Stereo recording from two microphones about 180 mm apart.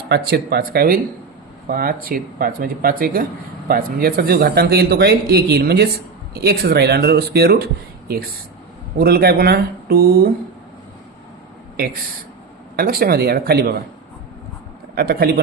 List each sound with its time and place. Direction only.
0.1 s speech: 60° right (ahead or behind)
12.7 s speech: 55° right (ahead or behind)
14.9 s speech: 60° right (ahead or behind)